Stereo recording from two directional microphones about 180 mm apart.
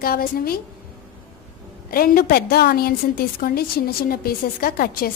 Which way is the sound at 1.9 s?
55° left (ahead or behind).